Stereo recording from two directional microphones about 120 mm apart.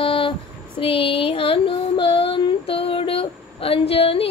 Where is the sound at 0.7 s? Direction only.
45° left (ahead or behind).